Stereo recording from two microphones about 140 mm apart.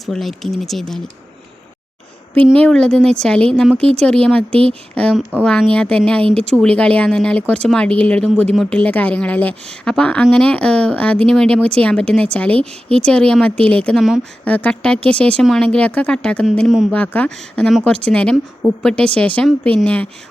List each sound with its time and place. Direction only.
0.0 s speech: centre (ahead or behind)
2.3 s a woman's voice: 10° left (ahead or behind)
4.5 s speech: 45° right (ahead or behind)
5.4 s a woman's voice: 5° left (ahead or behind)